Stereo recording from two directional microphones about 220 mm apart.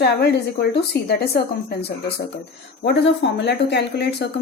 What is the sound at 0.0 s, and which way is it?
Speech, 45° left (ahead or behind).